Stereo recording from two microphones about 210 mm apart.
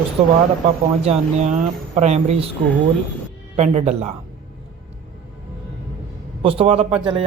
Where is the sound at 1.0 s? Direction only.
30° right (ahead or behind).